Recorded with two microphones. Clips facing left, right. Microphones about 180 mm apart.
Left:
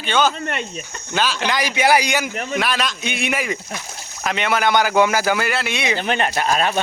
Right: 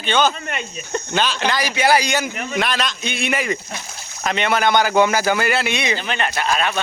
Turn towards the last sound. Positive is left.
turn(degrees=40)  # may be behind; listen again after turning